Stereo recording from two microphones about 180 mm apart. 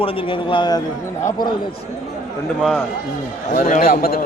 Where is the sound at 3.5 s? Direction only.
45° left (ahead or behind).